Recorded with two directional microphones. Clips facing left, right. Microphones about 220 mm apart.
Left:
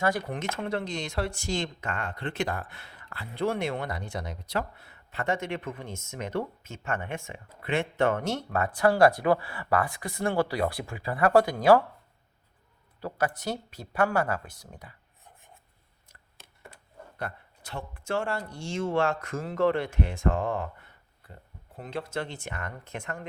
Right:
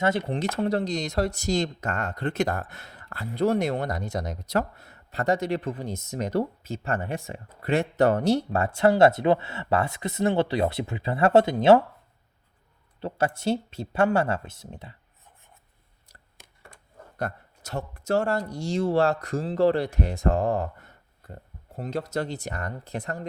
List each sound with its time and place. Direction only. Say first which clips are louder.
0.0 s speech: right 3 dB; 25° right (ahead or behind)
13.0 s speech: right 3 dB; 25° right (ahead or behind)
17.2 s speech: right 6 dB; 40° right (ahead or behind)